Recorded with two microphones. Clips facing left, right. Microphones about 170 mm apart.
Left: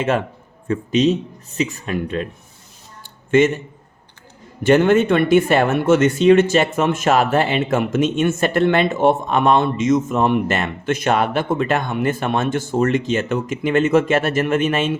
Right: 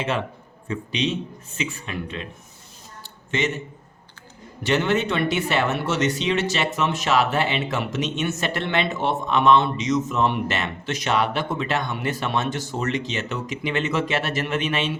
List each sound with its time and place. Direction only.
0.7 s speech: 45° left (ahead or behind)
3.3 s speech: 50° left (ahead or behind)
4.6 s speech: 50° left (ahead or behind)